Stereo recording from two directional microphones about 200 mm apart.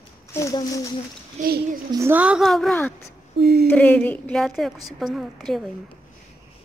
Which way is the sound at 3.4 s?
50° right (ahead or behind).